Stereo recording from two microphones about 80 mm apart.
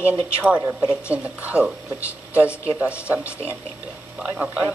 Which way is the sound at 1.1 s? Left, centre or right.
Centre.